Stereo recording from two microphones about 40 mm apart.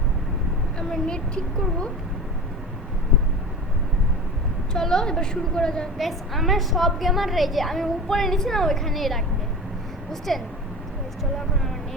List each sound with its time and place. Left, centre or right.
0.8 s a woman's voice: left
4.7 s a woman's voice: centre
6.0 s a woman's voice: centre